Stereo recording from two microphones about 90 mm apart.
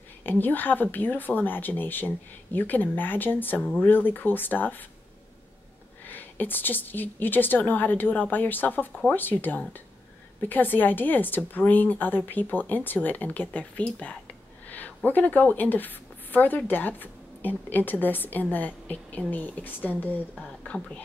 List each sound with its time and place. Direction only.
0.2 s speech: 20° left (ahead or behind)
6.0 s speech: 20° left (ahead or behind)